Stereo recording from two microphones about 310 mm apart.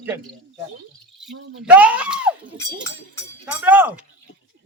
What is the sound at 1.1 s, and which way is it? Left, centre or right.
Speech, centre.